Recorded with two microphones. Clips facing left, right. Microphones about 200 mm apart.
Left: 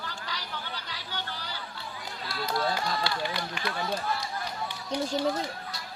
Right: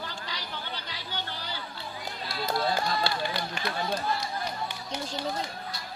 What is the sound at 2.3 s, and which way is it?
Speech, 20° right (ahead or behind).